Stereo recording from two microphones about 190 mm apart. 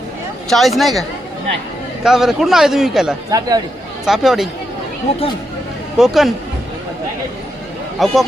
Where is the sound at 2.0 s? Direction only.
Centre (ahead or behind).